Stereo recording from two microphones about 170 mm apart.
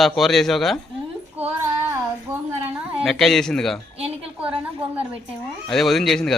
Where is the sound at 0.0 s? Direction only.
Centre (ahead or behind).